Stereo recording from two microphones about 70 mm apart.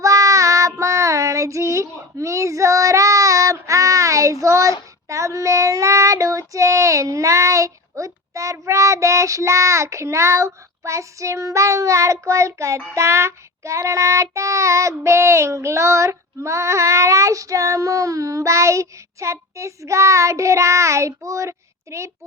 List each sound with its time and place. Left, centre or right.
0.0 s child singing: right